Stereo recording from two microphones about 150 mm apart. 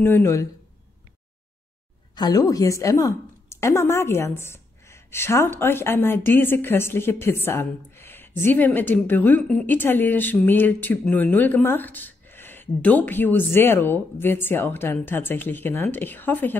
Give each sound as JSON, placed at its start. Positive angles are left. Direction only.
{"t": 0.0, "sound": "a woman's voice", "side_deg": 15}
{"t": 2.1, "sound": "a woman's voice", "side_deg": 25}